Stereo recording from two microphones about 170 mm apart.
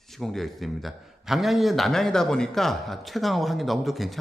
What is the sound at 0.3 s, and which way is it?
A man's voice, centre (ahead or behind).